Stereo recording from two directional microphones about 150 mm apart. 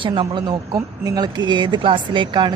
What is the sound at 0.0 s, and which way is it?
Speech, 35° right (ahead or behind).